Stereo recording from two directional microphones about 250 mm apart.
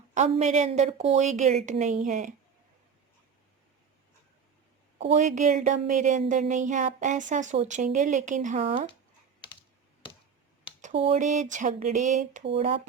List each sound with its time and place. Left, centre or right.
0.1 s speech: right
4.9 s speech: right
10.8 s speech: right